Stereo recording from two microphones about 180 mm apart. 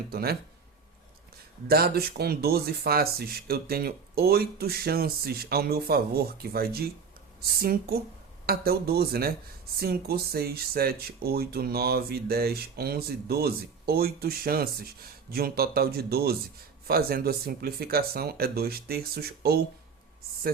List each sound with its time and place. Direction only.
0.1 s speech: 60° right (ahead or behind)
1.6 s speech: 60° right (ahead or behind)